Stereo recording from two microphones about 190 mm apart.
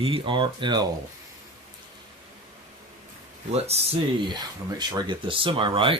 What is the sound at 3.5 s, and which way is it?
Speech, 35° right (ahead or behind).